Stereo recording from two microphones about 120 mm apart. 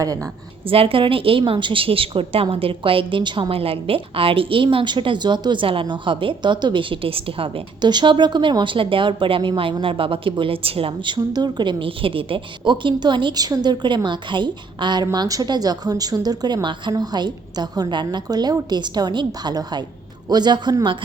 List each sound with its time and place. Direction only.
0.0 s a woman's voice: 30° right (ahead or behind)
0.6 s a woman's voice: 50° right (ahead or behind)